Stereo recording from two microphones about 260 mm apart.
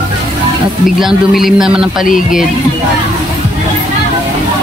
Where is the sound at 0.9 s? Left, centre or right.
Centre.